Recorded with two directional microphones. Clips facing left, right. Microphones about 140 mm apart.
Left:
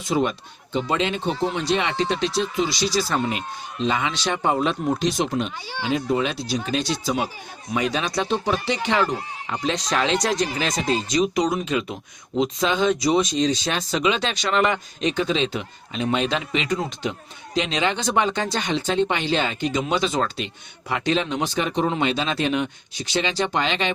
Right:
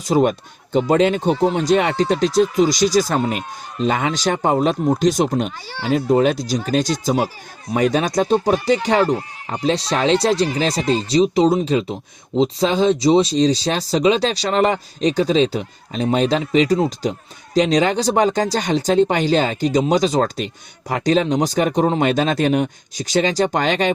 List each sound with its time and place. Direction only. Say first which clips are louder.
0.0 s a man's voice: right 6 dB; 45° right (ahead or behind)